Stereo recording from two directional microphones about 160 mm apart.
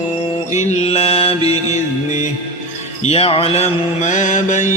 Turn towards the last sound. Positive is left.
turn(degrees=50)  # may be behind; listen again after turning